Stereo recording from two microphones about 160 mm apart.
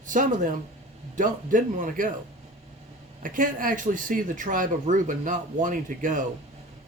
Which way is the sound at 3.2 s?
55° right (ahead or behind).